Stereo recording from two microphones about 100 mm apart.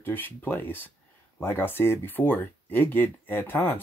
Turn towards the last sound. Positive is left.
turn(degrees=25)  # may be behind; listen again after turning